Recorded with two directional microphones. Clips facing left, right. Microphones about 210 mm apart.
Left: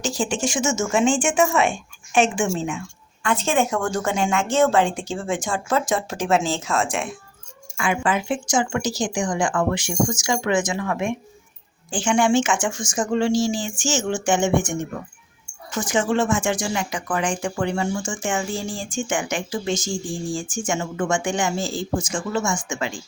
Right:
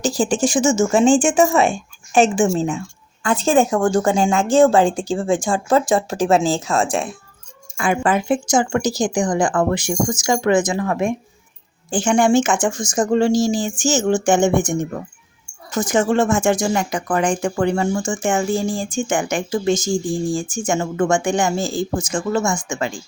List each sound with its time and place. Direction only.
0.0 s speech: 35° right (ahead or behind)